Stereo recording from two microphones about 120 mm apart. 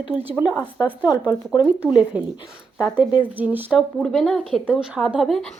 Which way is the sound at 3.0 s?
40° left (ahead or behind).